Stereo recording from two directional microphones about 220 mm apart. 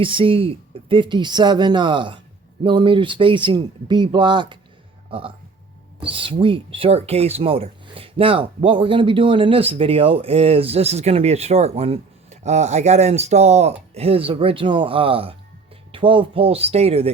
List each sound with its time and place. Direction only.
0.0 s speech: 25° right (ahead or behind)